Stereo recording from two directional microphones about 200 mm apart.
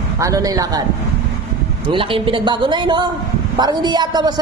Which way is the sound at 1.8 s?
25° right (ahead or behind).